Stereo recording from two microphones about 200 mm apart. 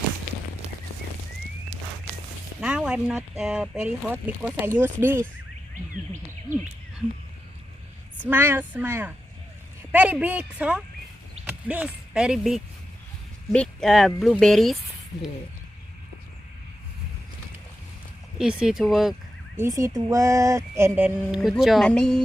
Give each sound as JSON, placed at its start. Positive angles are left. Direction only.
{"t": 2.6, "sound": "speech", "side_deg": -5}
{"t": 8.3, "sound": "speech", "side_deg": -10}
{"t": 18.3, "sound": "speech", "side_deg": -5}
{"t": 19.5, "sound": "speech", "side_deg": -15}